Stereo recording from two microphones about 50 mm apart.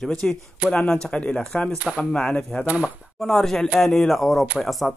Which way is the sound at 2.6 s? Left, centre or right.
Right.